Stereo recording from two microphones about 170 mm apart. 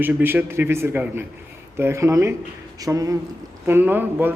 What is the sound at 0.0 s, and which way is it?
A man's voice, 10° right (ahead or behind).